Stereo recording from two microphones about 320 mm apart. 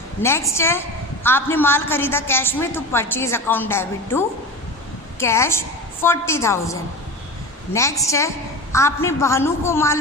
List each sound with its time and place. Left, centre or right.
0.2 s a woman's voice: centre